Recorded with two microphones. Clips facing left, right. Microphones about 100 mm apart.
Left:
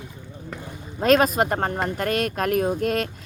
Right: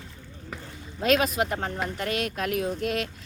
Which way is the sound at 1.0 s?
45° left (ahead or behind).